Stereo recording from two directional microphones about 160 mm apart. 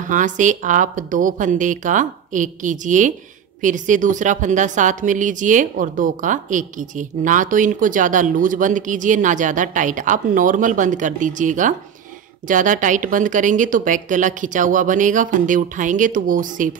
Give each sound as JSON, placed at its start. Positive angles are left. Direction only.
{"t": 0.0, "sound": "a woman's voice", "side_deg": -55}